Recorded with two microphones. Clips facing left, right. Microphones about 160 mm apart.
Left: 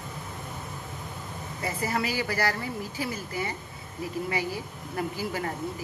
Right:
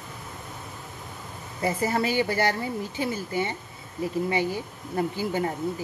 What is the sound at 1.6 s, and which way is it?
Speech, 25° right (ahead or behind).